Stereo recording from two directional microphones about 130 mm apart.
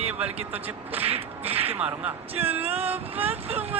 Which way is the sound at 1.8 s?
15° right (ahead or behind).